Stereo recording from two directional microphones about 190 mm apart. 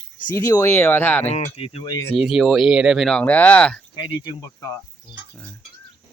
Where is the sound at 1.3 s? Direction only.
35° left (ahead or behind).